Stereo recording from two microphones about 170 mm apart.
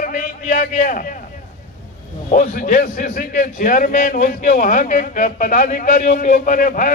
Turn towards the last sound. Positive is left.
turn(degrees=50)  # may be behind; listen again after turning